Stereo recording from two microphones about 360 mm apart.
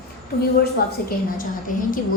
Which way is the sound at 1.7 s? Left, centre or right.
Left.